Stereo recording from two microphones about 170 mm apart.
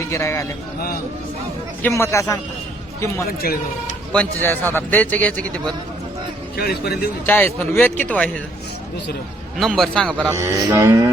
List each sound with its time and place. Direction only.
0.1 s a man's voice: 15° left (ahead or behind)
1.8 s a man's voice: 15° left (ahead or behind)
3.4 s speech: 60° left (ahead or behind)
4.1 s a man's voice: 10° left (ahead or behind)
6.6 s a man's voice: 65° left (ahead or behind)
7.3 s a man's voice: 10° left (ahead or behind)
9.6 s a man's voice: centre (ahead or behind)
10.2 s music: 15° right (ahead or behind)